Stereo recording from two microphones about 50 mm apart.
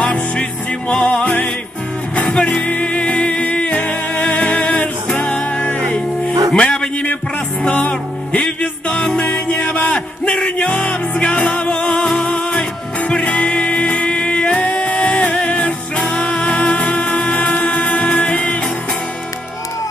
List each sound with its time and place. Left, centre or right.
0.0 s music: left
2.2 s music: left